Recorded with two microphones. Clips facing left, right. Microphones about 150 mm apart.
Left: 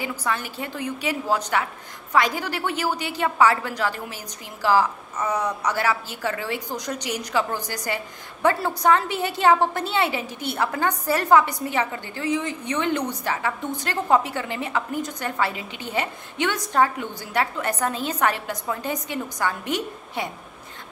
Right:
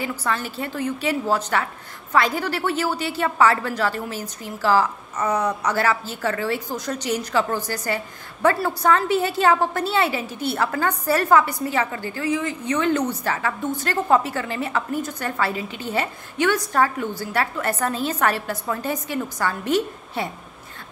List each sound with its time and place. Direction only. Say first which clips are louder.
0.2 s a woman's voice: right 2 dB; 15° left (ahead or behind)